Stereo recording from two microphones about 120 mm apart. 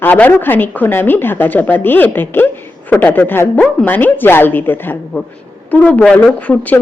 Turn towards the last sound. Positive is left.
turn(degrees=15)  # may be behind; listen again after turning